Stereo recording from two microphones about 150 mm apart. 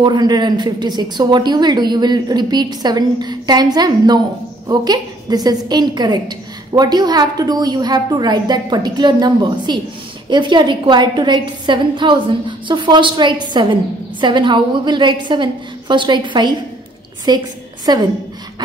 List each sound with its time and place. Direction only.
0.0 s a woman's voice: 30° right (ahead or behind)